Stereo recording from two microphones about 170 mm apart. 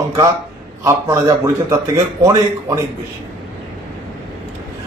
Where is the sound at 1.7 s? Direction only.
20° right (ahead or behind).